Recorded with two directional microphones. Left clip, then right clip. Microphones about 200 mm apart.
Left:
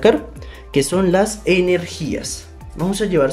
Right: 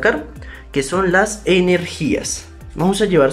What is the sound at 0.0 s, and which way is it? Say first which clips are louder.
Speech: left 2 dB; 15° left (ahead or behind).